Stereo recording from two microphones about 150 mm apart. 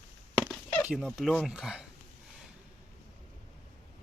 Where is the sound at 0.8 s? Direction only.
5° right (ahead or behind).